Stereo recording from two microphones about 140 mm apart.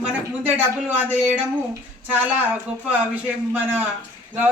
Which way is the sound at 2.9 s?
10° right (ahead or behind).